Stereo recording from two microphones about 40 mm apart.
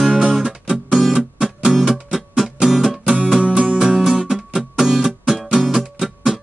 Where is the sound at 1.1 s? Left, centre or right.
Centre.